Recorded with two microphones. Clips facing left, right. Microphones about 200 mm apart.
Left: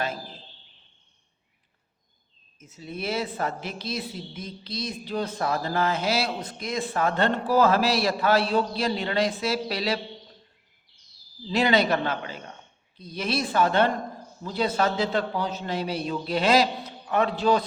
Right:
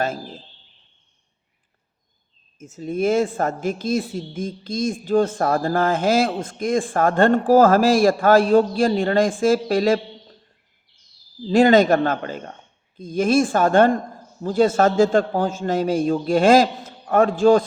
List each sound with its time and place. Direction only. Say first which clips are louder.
2.6 s speech: right 12 dB; 45° right (ahead or behind)
11.4 s speech: right 8 dB; 50° right (ahead or behind)